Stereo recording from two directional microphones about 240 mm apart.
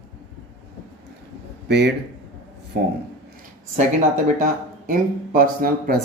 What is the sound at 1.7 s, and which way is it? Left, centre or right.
Speech, right.